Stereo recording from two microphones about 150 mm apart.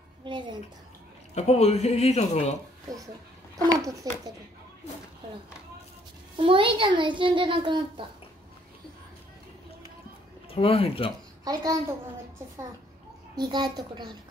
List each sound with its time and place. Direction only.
0.2 s a child's voice: 30° right (ahead or behind)
1.3 s speech: 45° left (ahead or behind)
3.8 s a woman's voice: 25° right (ahead or behind)
6.3 s a child's voice: 35° right (ahead or behind)
10.5 s speech: 40° left (ahead or behind)
11.4 s a woman's voice: 25° right (ahead or behind)
13.4 s a woman's voice: 25° right (ahead or behind)